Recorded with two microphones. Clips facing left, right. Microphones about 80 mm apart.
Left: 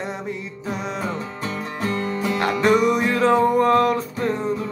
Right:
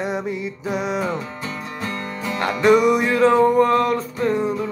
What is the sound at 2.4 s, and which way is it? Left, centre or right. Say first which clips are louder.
Music: right 3 dB; centre.